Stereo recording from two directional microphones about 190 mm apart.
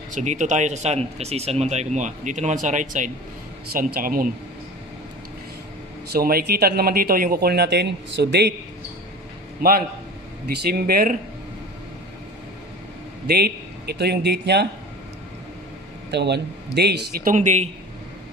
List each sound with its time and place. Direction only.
0.1 s speech: 40° right (ahead or behind)
6.1 s speech: 55° right (ahead or behind)
9.6 s a man's voice: 50° right (ahead or behind)
13.3 s speech: 60° right (ahead or behind)
16.1 s speech: 65° right (ahead or behind)
17.3 s speech: 40° right (ahead or behind)